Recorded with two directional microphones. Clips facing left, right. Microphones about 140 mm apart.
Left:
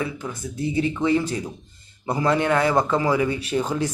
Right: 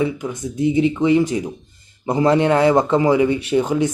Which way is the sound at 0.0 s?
20° right (ahead or behind).